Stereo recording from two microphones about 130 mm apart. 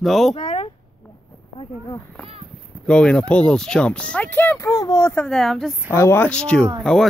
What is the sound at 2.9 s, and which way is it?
Speech, 5° left (ahead or behind).